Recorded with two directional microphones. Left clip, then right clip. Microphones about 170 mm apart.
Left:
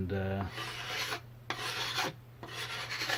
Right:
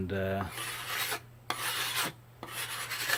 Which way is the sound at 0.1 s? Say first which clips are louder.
Right 4 dB; 40° right (ahead or behind).